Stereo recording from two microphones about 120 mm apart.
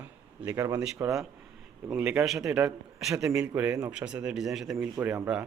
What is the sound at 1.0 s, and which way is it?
A man's voice, 20° right (ahead or behind).